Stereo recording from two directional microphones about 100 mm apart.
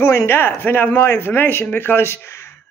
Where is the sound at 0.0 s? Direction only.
25° left (ahead or behind).